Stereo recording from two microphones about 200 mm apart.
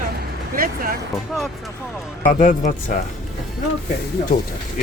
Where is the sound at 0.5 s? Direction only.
45° right (ahead or behind).